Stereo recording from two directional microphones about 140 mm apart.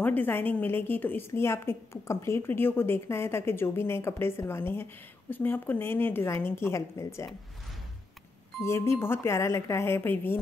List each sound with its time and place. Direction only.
0.0 s a woman's voice: 15° left (ahead or behind)
8.5 s speech: 20° left (ahead or behind)